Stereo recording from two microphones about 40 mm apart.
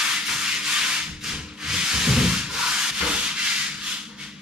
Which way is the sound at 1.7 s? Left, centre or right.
Centre.